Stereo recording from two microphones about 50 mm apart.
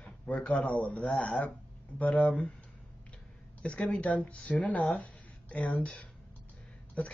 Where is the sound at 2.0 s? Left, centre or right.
Left.